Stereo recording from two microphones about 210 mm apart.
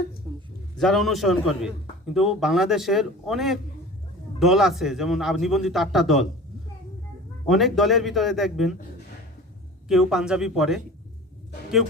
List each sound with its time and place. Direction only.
0.3 s a sound: 25° right (ahead or behind)
0.8 s a man's voice: centre (ahead or behind)
7.4 s a man's voice: centre (ahead or behind)
9.9 s a man's voice: centre (ahead or behind)